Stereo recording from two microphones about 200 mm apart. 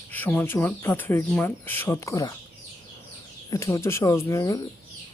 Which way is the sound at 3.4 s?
15° left (ahead or behind).